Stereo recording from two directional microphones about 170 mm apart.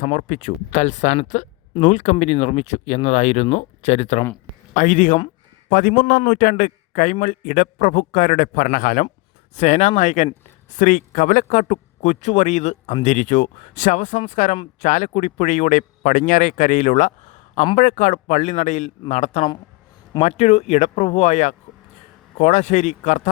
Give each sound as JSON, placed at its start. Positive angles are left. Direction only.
{"t": 0.0, "sound": "a man's voice", "side_deg": 45}